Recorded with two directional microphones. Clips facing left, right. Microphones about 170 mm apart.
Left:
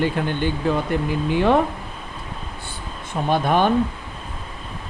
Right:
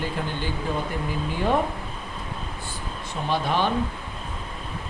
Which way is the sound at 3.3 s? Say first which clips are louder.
Left 6 dB; 50° left (ahead or behind).